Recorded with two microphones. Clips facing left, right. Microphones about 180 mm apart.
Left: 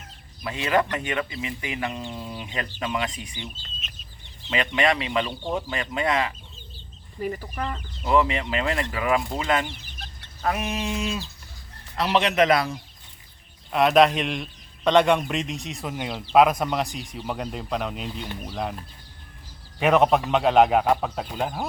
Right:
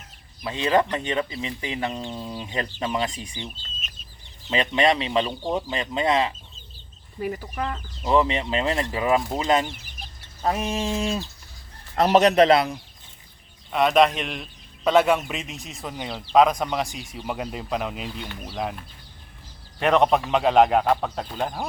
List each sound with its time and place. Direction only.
0.4 s speech: 30° right (ahead or behind)
4.5 s speech: 30° right (ahead or behind)
7.2 s speech: 10° right (ahead or behind)
8.0 s speech: 25° right (ahead or behind)
11.9 s a man's voice: 45° right (ahead or behind); by 12.7 s 25° right (ahead or behind)
13.7 s speech: centre (ahead or behind)
19.8 s speech: 5° left (ahead or behind)